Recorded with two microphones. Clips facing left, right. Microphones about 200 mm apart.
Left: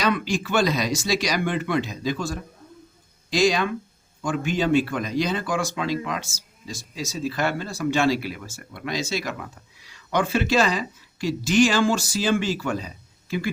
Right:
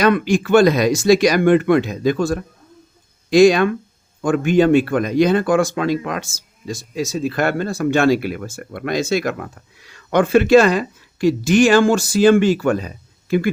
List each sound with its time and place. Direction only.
0.0 s speech: 55° right (ahead or behind)